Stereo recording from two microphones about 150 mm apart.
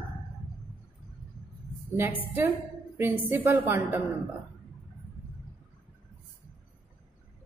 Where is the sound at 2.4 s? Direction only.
15° right (ahead or behind).